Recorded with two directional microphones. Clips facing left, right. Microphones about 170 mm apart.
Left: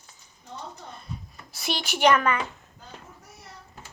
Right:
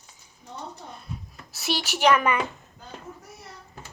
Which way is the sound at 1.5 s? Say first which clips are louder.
Right 2 dB; 5° right (ahead or behind).